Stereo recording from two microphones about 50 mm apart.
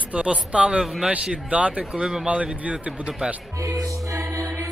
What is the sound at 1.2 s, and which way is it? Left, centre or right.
Speech, right.